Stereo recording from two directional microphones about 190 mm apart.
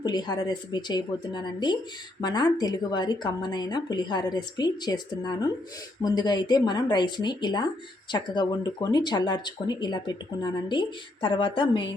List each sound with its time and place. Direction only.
0.0 s speech: 20° left (ahead or behind)